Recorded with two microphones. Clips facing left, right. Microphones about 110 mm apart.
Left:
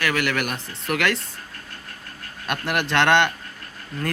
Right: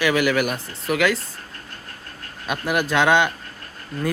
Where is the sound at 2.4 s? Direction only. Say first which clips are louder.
Right 2 dB; centre (ahead or behind).